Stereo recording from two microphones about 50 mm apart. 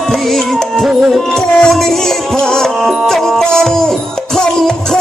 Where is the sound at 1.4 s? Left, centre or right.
Centre.